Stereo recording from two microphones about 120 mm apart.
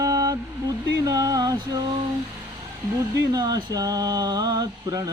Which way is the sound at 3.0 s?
30° right (ahead or behind).